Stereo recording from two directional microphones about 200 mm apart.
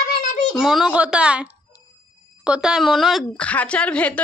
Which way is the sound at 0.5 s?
5° right (ahead or behind).